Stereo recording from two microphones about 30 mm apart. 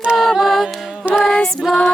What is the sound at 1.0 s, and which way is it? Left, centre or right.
Music, right.